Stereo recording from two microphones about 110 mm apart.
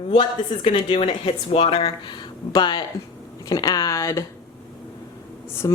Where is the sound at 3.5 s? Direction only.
35° left (ahead or behind).